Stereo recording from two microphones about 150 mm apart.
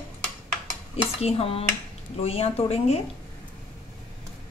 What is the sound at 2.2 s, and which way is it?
Speech, 40° left (ahead or behind).